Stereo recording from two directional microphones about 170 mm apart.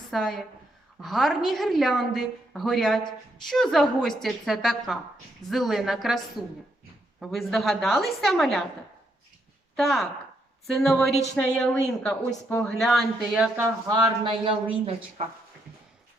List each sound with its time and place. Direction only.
0.1 s a woman's voice: centre (ahead or behind)
9.7 s a woman's voice: centre (ahead or behind)
13.8 s speech: 25° right (ahead or behind)